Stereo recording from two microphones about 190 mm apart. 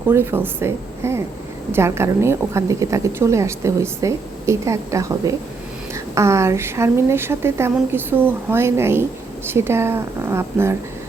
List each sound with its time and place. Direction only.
0.1 s a woman's voice: 15° right (ahead or behind)